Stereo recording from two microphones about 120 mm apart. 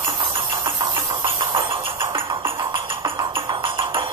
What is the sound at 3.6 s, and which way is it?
Music, 45° right (ahead or behind).